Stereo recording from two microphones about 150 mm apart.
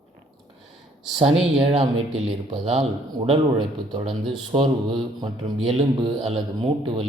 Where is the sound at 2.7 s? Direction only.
45° right (ahead or behind).